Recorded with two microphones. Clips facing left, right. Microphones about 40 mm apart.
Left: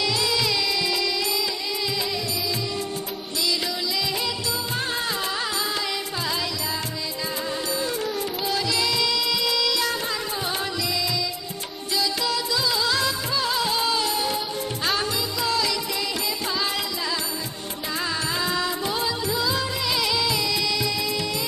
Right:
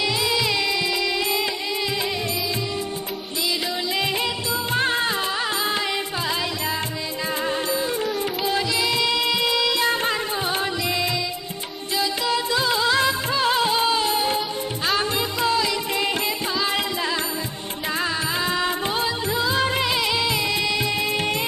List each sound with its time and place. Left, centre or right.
0.0 s music: centre
4.7 s music: right
8.9 s music: right
12.5 s music: right
13.7 s music: right
20.0 s music: right